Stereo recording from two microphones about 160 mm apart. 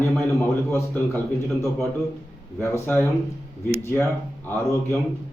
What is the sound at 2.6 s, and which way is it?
Speech, 15° left (ahead or behind).